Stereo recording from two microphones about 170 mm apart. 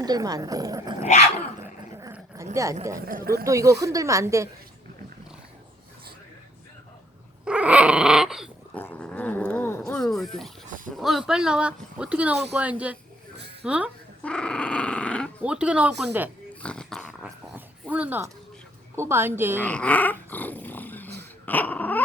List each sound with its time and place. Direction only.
0.0 s speech: 20° right (ahead or behind)
2.6 s speech: 15° right (ahead or behind)
3.1 s speech: 60° right (ahead or behind)
3.4 s speech: 20° right (ahead or behind)
7.4 s dog: 5° right (ahead or behind)
8.7 s dog: 10° left (ahead or behind)
10.9 s speech: centre (ahead or behind)
14.3 s dog: 5° left (ahead or behind)
15.4 s speech: 5° right (ahead or behind)
16.6 s dog: 5° left (ahead or behind)
18.9 s speech: 15° right (ahead or behind)
19.6 s dog: 10° left (ahead or behind)